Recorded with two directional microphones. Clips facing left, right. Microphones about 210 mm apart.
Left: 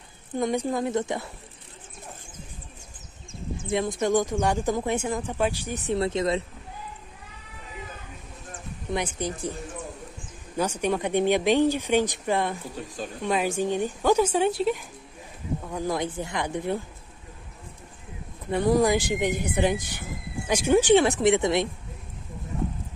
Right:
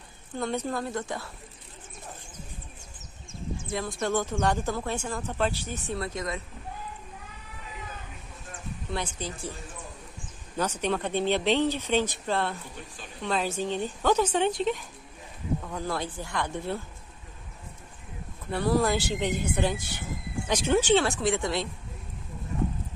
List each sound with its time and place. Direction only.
0.4 s speech: 15° left (ahead or behind)
3.7 s speech: 15° left (ahead or behind)
5.9 s speech: 25° left (ahead or behind)
8.9 s speech: 15° left (ahead or behind)
10.6 s speech: 10° left (ahead or behind)
18.5 s speech: 15° left (ahead or behind)